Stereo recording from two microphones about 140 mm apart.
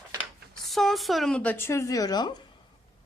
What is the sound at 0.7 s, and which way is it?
Speech, centre (ahead or behind).